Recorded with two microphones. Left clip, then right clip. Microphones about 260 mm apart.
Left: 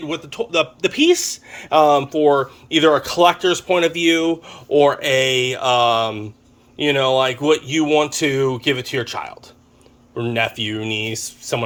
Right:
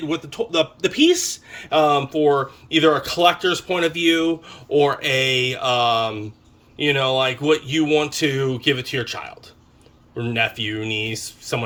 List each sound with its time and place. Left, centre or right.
0.0 s speech: centre